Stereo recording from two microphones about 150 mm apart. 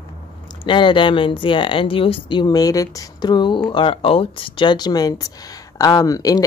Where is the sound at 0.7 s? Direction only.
35° left (ahead or behind).